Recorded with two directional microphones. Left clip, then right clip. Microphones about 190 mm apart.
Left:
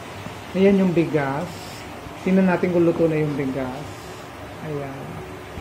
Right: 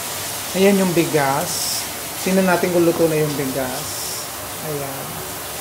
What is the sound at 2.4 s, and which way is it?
Speech, 15° right (ahead or behind).